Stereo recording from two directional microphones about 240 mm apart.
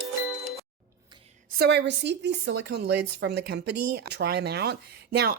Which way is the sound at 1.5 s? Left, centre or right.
Right.